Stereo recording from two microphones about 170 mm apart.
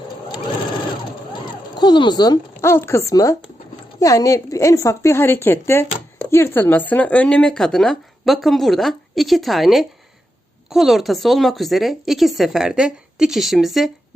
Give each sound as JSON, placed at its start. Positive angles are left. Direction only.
{"t": 1.7, "sound": "a woman's voice", "side_deg": 25}